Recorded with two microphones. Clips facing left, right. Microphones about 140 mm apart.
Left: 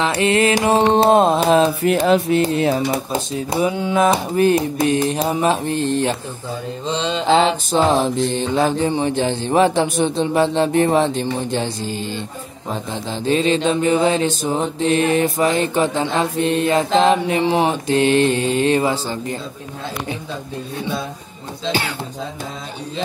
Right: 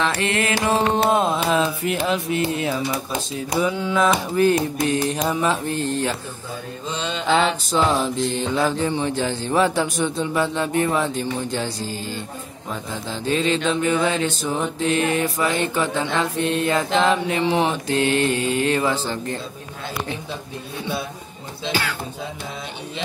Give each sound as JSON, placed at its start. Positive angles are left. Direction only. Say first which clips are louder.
{"t": 0.0, "sound": "mantra", "louder": "left 6 dB", "side_deg": 25}
{"t": 0.8, "sound": "music", "louder": "left 8 dB", "side_deg": 35}
{"t": 3.4, "sound": "mantra", "louder": "left 1 dB", "side_deg": 20}